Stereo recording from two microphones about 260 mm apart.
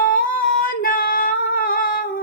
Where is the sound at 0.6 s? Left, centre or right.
Left.